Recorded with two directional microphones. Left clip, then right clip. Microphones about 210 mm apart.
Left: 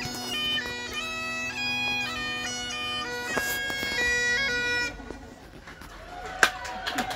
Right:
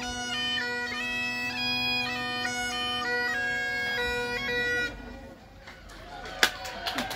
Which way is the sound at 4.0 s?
30° right (ahead or behind).